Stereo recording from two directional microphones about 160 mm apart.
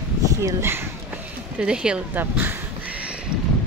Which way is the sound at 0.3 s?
20° right (ahead or behind).